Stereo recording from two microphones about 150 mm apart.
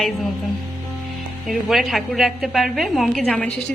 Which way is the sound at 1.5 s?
Centre (ahead or behind).